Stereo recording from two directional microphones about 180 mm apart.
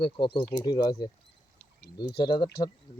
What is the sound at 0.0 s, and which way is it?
Speech, 30° left (ahead or behind).